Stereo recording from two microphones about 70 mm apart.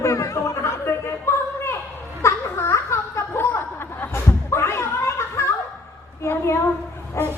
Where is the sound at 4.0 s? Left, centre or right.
Left.